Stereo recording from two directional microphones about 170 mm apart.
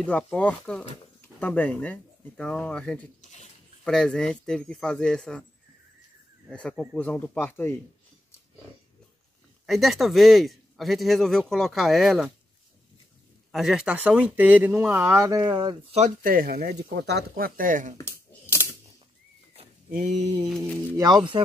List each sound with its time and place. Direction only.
0.0 s speech: 5° left (ahead or behind)
3.2 s speech: 40° left (ahead or behind)
3.8 s speech: 5° left (ahead or behind)
6.5 s speech: 5° left (ahead or behind)
9.7 s speech: centre (ahead or behind)
13.5 s speech: centre (ahead or behind); by 16.0 s 30° right (ahead or behind)
16.0 s speech: 55° right (ahead or behind)
17.9 s a sound: 15° left (ahead or behind)
19.9 s a sound: 45° right (ahead or behind)
21.0 s speech: 25° right (ahead or behind)